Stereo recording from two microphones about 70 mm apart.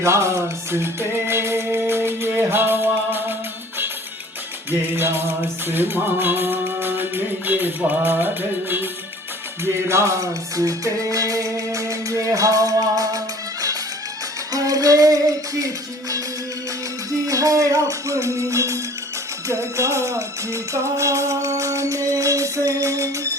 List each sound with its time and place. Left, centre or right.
0.0 s music: right
4.7 s music: right
9.6 s music: right
17.2 s music: right